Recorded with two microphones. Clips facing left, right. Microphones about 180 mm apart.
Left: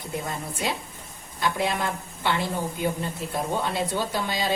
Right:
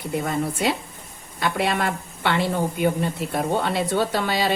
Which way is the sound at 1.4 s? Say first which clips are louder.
Right 3 dB; 65° right (ahead or behind).